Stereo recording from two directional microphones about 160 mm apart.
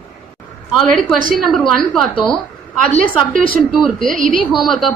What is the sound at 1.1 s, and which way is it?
Speech, 60° right (ahead or behind).